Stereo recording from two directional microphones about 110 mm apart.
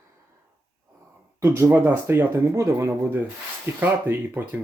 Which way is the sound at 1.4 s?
25° right (ahead or behind).